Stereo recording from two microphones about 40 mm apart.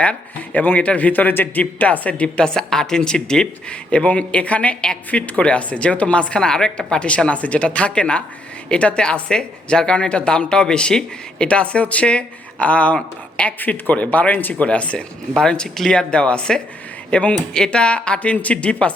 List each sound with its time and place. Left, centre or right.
0.0 s a man's voice: left
1.8 s speech: left
2.4 s speech: centre; by 4.8 s left
4.8 s speech: left
7.3 s speech: left
13.6 s a man's voice: left
13.9 s speech: left
15.4 s speech: centre; by 18.9 s left